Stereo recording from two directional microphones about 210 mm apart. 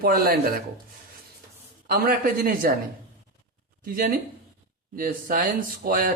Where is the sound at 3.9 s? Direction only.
40° right (ahead or behind).